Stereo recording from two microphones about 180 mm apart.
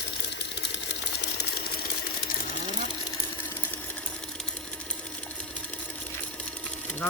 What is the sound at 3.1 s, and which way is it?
Sewing machine, 15° left (ahead or behind).